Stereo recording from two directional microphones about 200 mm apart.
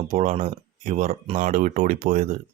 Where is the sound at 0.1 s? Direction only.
35° right (ahead or behind).